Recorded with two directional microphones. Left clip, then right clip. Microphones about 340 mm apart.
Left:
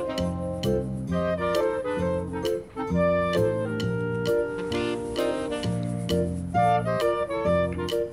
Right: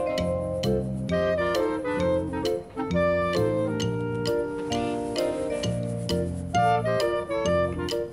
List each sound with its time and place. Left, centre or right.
0.2 s music: centre